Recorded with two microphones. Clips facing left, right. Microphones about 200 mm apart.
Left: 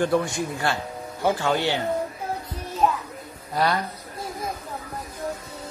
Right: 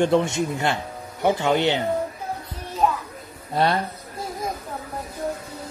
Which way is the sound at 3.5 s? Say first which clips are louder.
Right 2 dB; 25° right (ahead or behind).